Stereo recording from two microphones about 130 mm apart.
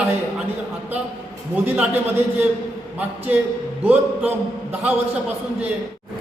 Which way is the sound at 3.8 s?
15° right (ahead or behind).